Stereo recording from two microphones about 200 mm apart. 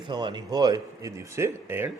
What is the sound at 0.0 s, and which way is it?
Speech, 25° right (ahead or behind).